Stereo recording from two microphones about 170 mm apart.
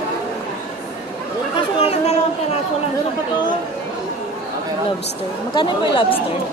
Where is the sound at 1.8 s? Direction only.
35° left (ahead or behind).